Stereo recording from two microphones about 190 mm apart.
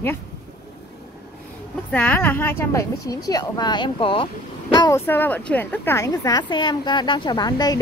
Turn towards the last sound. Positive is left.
turn(degrees=20)  # may be behind; listen again after turning